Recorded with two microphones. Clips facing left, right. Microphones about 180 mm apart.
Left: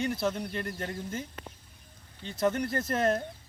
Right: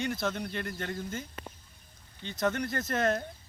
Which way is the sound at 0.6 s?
35° left (ahead or behind).